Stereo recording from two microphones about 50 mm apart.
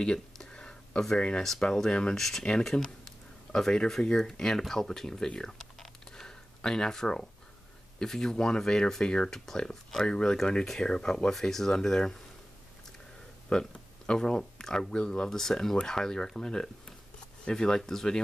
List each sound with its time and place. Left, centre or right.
0.0 s a sound: centre
1.4 s speech: centre
13.5 s speech: centre